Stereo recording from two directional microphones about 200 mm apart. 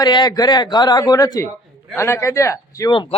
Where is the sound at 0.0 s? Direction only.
20° left (ahead or behind).